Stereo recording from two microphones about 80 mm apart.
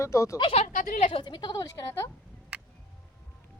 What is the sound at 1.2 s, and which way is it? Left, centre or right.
Speech, left.